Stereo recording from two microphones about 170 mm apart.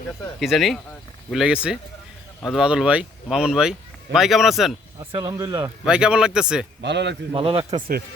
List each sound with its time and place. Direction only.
0.3 s speech: centre (ahead or behind)
5.1 s speech: 20° right (ahead or behind)
5.8 s speech: 5° right (ahead or behind)
6.8 s a man's voice: 90° right
7.3 s speech: 30° right (ahead or behind)
7.7 s speech: 55° right (ahead or behind)